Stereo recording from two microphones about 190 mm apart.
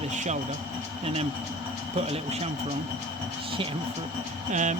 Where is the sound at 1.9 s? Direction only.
35° right (ahead or behind).